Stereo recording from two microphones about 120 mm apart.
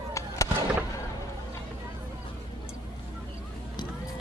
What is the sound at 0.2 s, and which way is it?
Fireworks, 25° left (ahead or behind).